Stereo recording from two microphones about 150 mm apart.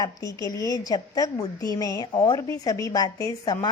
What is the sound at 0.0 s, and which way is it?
A woman's voice, 25° left (ahead or behind).